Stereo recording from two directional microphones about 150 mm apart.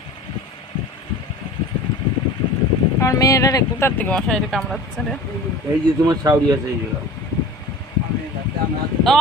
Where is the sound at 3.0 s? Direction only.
20° left (ahead or behind); by 4.8 s 5° left (ahead or behind).